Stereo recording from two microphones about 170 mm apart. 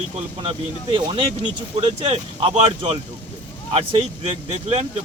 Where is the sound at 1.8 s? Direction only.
35° right (ahead or behind).